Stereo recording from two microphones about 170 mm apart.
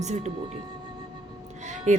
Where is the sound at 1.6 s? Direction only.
45° right (ahead or behind).